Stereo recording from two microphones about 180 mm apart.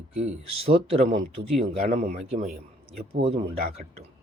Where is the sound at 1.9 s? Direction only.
50° right (ahead or behind).